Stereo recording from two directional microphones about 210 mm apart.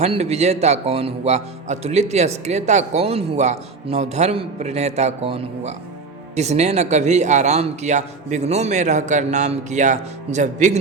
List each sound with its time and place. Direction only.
0.0 s a man's voice: 30° right (ahead or behind)